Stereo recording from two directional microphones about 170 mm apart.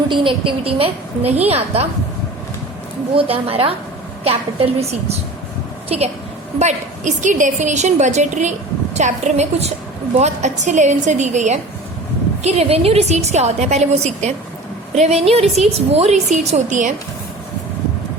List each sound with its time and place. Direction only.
0.1 s a woman's voice: 30° right (ahead or behind)
3.2 s a woman's voice: 35° right (ahead or behind)
6.6 s a woman's voice: 45° right (ahead or behind)